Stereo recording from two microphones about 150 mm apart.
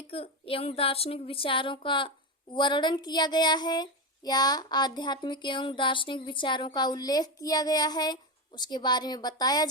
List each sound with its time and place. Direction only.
0.1 s speech: 40° left (ahead or behind)